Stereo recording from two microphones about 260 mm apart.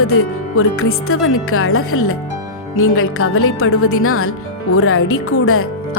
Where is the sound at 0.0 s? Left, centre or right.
Left.